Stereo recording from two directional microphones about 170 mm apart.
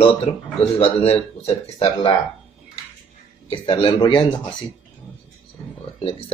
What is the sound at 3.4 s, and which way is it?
Speech, 30° left (ahead or behind).